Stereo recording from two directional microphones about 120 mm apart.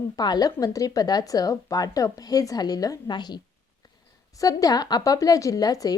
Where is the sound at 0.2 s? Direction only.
35° left (ahead or behind).